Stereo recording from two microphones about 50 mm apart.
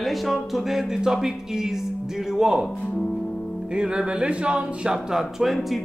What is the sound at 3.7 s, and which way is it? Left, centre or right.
Speech, centre.